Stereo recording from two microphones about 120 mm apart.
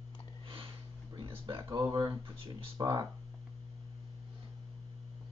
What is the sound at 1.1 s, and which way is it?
Speech, 40° right (ahead or behind).